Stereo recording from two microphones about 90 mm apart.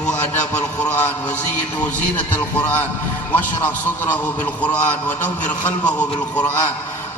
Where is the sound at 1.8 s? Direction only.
15° left (ahead or behind).